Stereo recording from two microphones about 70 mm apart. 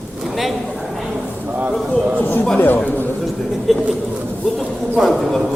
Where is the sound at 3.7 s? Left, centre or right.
Centre.